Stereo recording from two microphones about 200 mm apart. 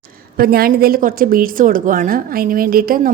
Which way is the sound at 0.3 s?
45° right (ahead or behind).